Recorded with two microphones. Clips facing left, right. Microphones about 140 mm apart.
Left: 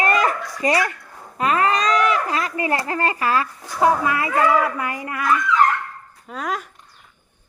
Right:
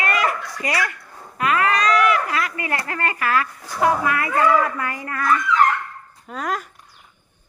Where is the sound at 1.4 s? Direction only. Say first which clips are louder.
Left 1 dB; 30° left (ahead or behind).